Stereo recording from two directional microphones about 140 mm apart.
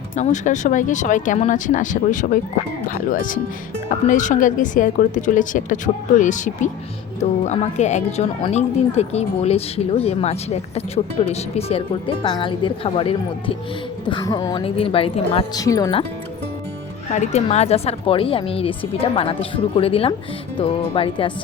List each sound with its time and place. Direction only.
0.2 s speech: 60° left (ahead or behind); by 14.5 s 30° left (ahead or behind)
14.5 s speech: 40° left (ahead or behind)
15.5 s speech: 25° left (ahead or behind)
17.1 s speech: 55° left (ahead or behind); by 21.3 s 40° left (ahead or behind)